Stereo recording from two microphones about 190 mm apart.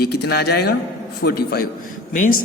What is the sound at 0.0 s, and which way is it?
Speech, 55° left (ahead or behind).